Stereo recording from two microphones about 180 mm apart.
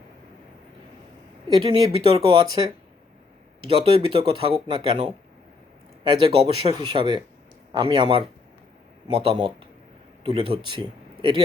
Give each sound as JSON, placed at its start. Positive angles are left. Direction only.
{"t": 1.6, "sound": "speech", "side_deg": -30}
{"t": 6.1, "sound": "speech", "side_deg": -25}